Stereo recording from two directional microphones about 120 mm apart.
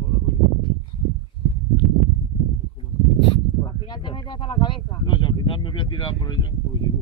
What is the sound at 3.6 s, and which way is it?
Speech, 40° left (ahead or behind).